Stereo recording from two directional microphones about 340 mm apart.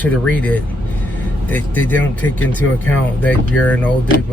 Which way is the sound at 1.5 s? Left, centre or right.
Centre.